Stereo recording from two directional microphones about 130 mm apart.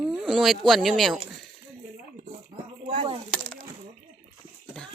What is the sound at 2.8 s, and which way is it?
Speech, 70° right (ahead or behind).